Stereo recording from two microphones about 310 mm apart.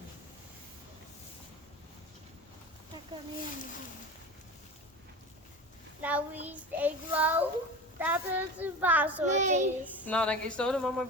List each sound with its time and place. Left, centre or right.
6.0 s a woman's voice: centre
9.2 s a child's voice: right
10.0 s a woman's voice: centre